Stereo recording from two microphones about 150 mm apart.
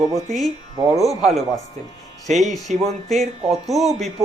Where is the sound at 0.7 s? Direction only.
25° right (ahead or behind).